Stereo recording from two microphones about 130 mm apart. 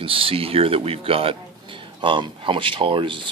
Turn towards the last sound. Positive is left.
turn(degrees=-40)  # may be behind; listen again after turning